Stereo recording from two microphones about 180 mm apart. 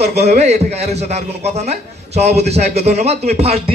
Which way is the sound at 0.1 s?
40° right (ahead or behind).